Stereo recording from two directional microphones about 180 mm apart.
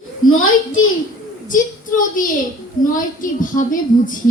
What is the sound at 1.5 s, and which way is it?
A woman's voice, 45° left (ahead or behind).